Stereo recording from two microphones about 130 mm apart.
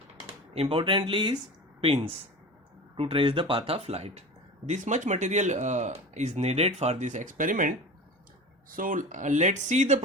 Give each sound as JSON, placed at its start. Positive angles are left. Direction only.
{"t": 0.5, "sound": "speech", "side_deg": -50}
{"t": 1.8, "sound": "speech", "side_deg": -50}
{"t": 4.6, "sound": "speech", "side_deg": -65}
{"t": 8.7, "sound": "speech", "side_deg": -90}